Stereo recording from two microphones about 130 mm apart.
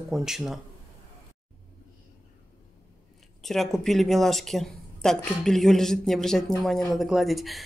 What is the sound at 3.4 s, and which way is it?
Speech, centre (ahead or behind).